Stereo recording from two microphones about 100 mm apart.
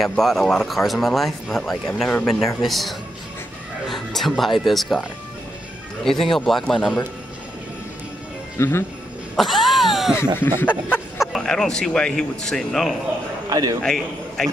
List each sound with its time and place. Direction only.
0.0 s speech: centre (ahead or behind)
6.3 s speech: 5° left (ahead or behind)
8.5 s speech: 25° left (ahead or behind)
9.4 s cat: centre (ahead or behind)
10.4 s speech: 20° left (ahead or behind)
11.1 s speech: 5° left (ahead or behind)
13.5 s a man's voice: 40° right (ahead or behind)
13.8 s a man's voice: 5° left (ahead or behind)